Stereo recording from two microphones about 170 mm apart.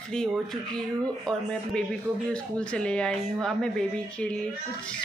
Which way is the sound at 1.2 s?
5° left (ahead or behind).